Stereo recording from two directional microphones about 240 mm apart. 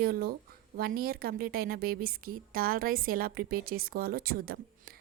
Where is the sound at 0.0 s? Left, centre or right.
Right.